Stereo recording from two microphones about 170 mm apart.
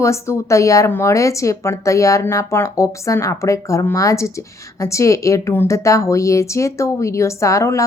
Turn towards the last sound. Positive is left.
turn(degrees=15)  # may be behind; listen again after turning